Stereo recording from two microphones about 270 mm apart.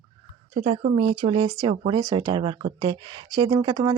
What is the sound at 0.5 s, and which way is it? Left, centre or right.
Speech, right.